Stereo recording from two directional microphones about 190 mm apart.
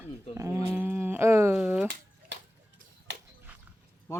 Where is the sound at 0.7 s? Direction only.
10° right (ahead or behind).